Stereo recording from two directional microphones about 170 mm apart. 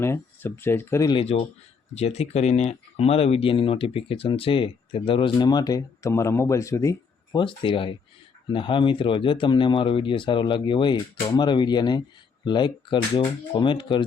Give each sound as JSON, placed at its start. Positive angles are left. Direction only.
{"t": 0.0, "sound": "speech", "side_deg": 15}
{"t": 1.0, "sound": "speech", "side_deg": 30}
{"t": 7.3, "sound": "speech", "side_deg": 30}